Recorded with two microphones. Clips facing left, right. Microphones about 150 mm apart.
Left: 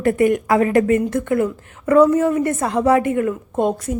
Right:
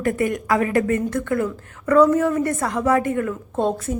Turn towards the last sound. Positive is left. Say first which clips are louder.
# left 2 dB
turn(degrees=10)  # may be behind; listen again after turning